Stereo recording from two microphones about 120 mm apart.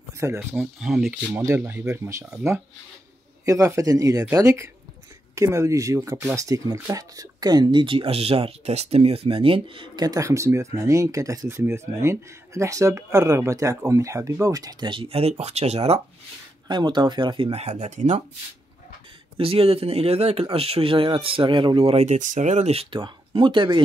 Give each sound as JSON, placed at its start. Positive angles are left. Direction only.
{"t": 0.2, "sound": "speech", "side_deg": -20}
{"t": 0.7, "sound": "speech", "side_deg": -5}
{"t": 1.4, "sound": "speech", "side_deg": -25}
{"t": 3.4, "sound": "speech", "side_deg": -25}
{"t": 16.6, "sound": "speech", "side_deg": -40}
{"t": 19.3, "sound": "speech", "side_deg": -50}